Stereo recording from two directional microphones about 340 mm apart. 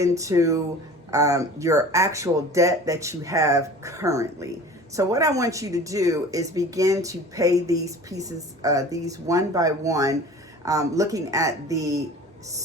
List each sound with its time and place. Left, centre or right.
0.0 s speech: centre